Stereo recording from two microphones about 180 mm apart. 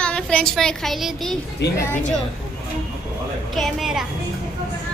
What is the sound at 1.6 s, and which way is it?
Speech, 70° left (ahead or behind).